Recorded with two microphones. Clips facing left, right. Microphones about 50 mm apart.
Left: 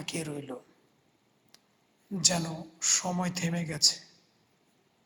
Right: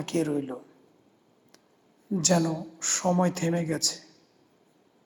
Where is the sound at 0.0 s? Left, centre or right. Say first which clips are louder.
Right 10 dB; right.